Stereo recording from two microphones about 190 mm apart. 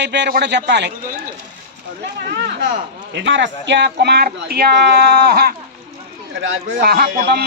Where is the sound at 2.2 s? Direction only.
55° right (ahead or behind).